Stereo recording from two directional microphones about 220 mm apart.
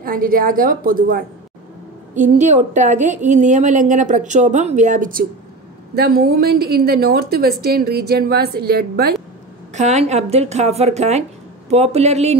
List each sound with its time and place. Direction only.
0.0 s a woman's voice: 40° right (ahead or behind)
9.8 s a woman's voice: 30° right (ahead or behind)